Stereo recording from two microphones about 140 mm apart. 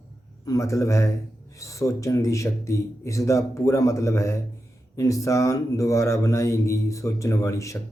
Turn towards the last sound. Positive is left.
turn(degrees=20)  # may be behind; listen again after turning